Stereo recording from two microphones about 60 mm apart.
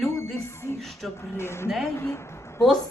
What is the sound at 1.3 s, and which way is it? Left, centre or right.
Speech, left.